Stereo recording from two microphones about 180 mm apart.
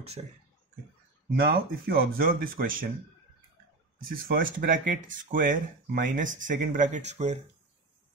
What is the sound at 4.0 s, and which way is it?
Speech, 50° right (ahead or behind).